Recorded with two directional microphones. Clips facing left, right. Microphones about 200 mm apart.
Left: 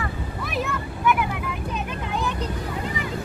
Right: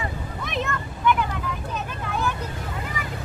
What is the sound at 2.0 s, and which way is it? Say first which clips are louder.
Vehicle: right 1 dB; 20° left (ahead or behind).